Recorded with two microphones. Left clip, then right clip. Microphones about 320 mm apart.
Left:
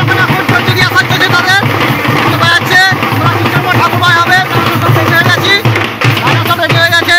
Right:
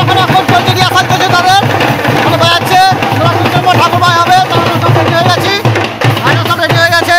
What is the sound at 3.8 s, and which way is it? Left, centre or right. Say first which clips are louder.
Music: right 1 dB; centre.